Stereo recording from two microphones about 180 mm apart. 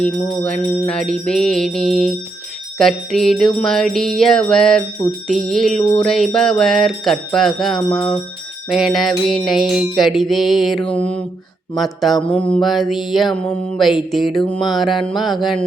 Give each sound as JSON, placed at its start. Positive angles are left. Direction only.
{"t": 0.5, "sound": "music", "side_deg": 5}
{"t": 5.7, "sound": "music", "side_deg": 35}
{"t": 6.1, "sound": "music", "side_deg": 0}
{"t": 7.9, "sound": "music", "side_deg": 30}
{"t": 8.7, "sound": "music", "side_deg": 0}